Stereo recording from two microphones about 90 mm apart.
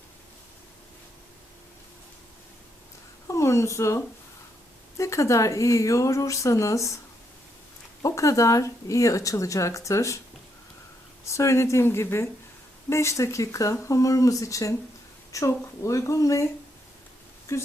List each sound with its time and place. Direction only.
3.2 s speech: 35° left (ahead or behind)
8.0 s speech: 35° left (ahead or behind)
11.3 s speech: 35° left (ahead or behind)